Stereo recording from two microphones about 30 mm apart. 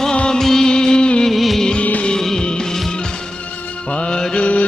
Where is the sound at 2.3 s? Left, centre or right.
Left.